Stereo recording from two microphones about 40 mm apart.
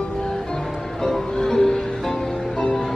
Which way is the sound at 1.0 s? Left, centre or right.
Centre.